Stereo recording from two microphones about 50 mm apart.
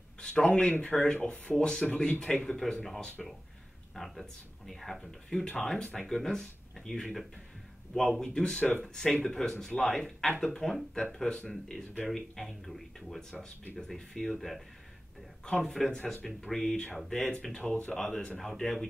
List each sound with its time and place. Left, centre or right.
0.2 s speech: centre
15.6 s speech: centre
17.3 s speech: left
17.9 s speech: centre